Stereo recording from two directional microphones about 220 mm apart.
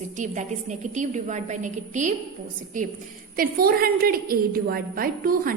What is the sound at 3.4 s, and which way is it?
A woman's voice, 45° right (ahead or behind).